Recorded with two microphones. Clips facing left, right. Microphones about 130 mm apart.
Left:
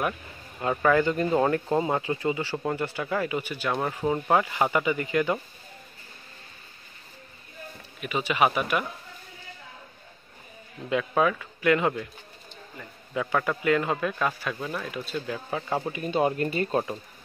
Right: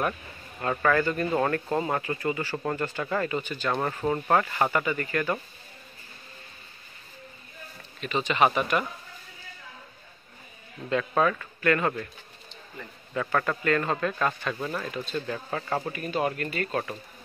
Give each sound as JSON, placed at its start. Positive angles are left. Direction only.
{"t": 0.6, "sound": "speech", "side_deg": 15}
{"t": 8.0, "sound": "speech", "side_deg": 10}
{"t": 10.9, "sound": "speech", "side_deg": 10}
{"t": 13.1, "sound": "speech", "side_deg": 10}
{"t": 16.0, "sound": "speech", "side_deg": 25}